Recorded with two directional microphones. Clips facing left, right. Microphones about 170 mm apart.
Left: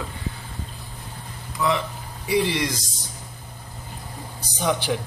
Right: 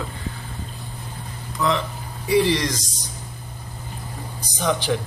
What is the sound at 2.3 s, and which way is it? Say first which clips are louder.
Speech: right 3 dB; 10° left (ahead or behind).